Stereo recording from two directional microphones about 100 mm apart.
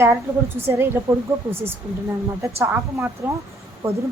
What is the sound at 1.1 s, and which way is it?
Speech, 40° right (ahead or behind).